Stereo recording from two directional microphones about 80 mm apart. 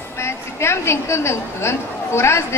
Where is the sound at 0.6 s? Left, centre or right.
Left.